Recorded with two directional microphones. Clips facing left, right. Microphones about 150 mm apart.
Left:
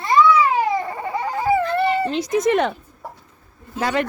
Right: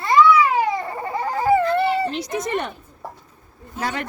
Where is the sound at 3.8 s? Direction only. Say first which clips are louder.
Left 5 dB; 90° left.